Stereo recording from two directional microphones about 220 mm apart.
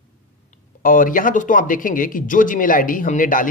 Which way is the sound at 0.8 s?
40° left (ahead or behind).